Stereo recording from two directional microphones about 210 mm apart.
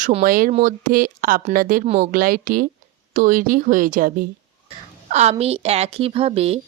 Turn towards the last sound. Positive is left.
turn(degrees=-30)  # may be behind; listen again after turning